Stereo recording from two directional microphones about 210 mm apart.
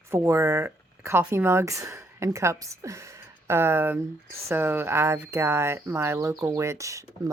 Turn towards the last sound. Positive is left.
turn(degrees=-15)  # may be behind; listen again after turning